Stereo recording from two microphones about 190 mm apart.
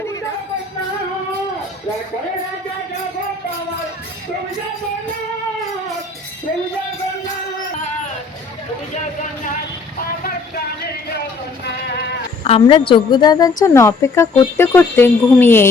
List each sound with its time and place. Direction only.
12.5 s a woman's voice: 30° left (ahead or behind); by 15.7 s 10° left (ahead or behind)